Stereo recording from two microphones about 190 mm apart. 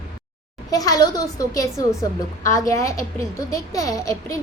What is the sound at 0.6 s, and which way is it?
A woman's voice, 20° left (ahead or behind).